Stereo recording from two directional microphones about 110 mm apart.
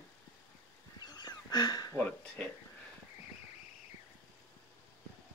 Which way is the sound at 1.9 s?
15° left (ahead or behind).